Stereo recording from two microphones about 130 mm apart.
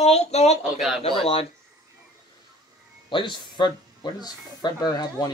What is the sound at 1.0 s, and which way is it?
Speech, 45° left (ahead or behind).